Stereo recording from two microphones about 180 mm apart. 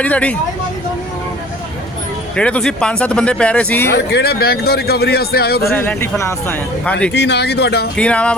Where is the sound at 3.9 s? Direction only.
65° left (ahead or behind).